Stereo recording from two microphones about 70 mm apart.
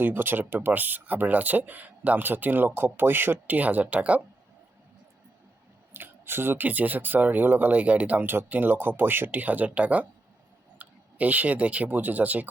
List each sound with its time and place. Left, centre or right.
0.0 s speech: right
5.9 s speech: right